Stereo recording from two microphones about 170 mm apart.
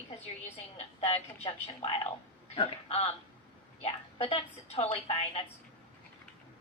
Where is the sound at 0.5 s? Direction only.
35° left (ahead or behind).